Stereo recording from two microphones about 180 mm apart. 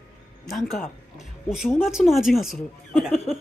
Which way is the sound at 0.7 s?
Centre (ahead or behind).